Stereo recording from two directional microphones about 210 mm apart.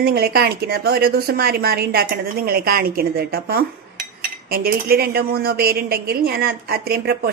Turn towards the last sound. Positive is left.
turn(degrees=-50)  # may be behind; listen again after turning